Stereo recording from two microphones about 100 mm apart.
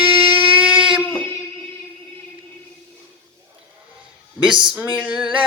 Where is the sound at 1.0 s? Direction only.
15° left (ahead or behind).